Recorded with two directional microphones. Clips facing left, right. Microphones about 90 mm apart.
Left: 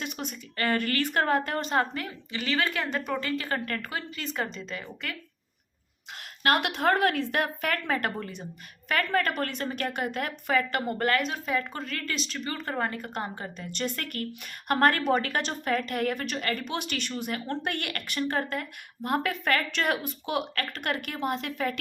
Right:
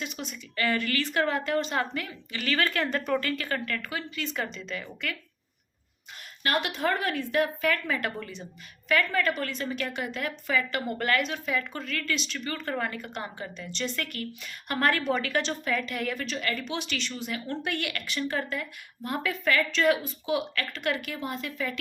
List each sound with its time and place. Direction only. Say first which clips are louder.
0.0 s a woman's voice: left 1 dB; 50° left (ahead or behind); by 3.6 s 25° left (ahead or behind)
3.7 s a woman's voice: even; 40° left (ahead or behind)
4.7 s speech: right 2 dB; 30° left (ahead or behind)
6.1 s a woman's voice: left 3 dB; 65° left (ahead or behind); by 12.4 s 40° left (ahead or behind)
12.5 s a woman's voice: even; 25° left (ahead or behind); by 21.8 s 55° left (ahead or behind)